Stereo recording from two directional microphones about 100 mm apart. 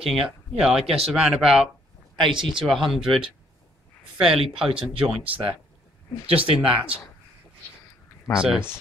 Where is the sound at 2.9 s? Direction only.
5° right (ahead or behind).